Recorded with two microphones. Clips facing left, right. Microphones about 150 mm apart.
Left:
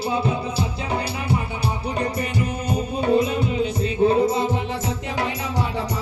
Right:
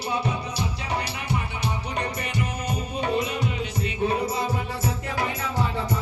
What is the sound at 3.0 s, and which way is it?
Music, 35° left (ahead or behind).